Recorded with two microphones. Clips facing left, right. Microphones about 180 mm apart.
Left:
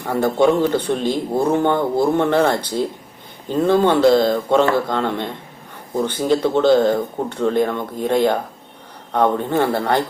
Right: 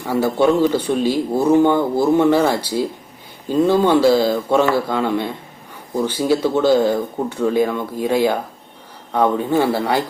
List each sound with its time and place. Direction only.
0.0 s speech: 10° right (ahead or behind)